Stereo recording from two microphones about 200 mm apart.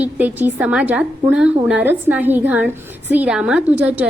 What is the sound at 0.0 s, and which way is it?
A woman's voice, 10° right (ahead or behind).